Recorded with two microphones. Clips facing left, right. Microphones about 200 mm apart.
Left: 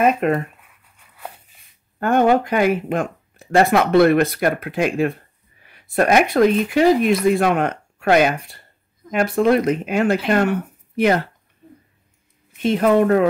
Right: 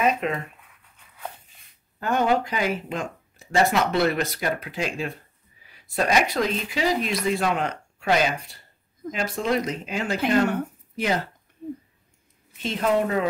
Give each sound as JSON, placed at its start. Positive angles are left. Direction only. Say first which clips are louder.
{"t": 0.0, "sound": "speech", "louder": "left 6 dB", "side_deg": 50}
{"t": 2.0, "sound": "speech", "louder": "left 6 dB", "side_deg": 55}
{"t": 12.6, "sound": "speech", "louder": "left 8 dB", "side_deg": 60}